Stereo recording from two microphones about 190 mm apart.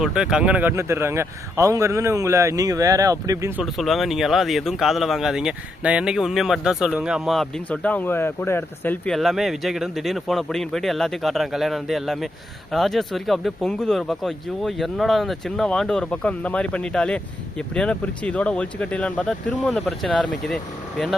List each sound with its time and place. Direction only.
0.0 s speech: 5° right (ahead or behind)
3.6 s speech: centre (ahead or behind)